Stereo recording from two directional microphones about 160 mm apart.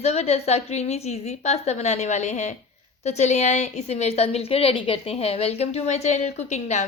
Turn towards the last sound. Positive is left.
turn(degrees=45)  # may be behind; listen again after turning